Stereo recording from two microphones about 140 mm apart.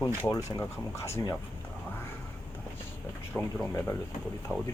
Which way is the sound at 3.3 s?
15° left (ahead or behind).